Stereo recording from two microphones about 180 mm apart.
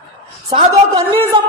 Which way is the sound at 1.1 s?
30° right (ahead or behind).